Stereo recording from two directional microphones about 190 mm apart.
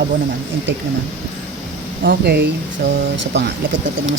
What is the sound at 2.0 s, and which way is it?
Speech, 65° right (ahead or behind).